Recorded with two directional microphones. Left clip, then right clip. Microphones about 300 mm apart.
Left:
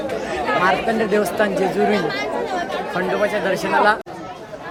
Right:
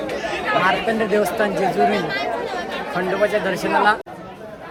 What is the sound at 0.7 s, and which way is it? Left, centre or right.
Speech, centre.